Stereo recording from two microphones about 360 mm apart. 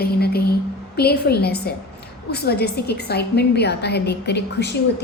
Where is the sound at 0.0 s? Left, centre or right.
Left.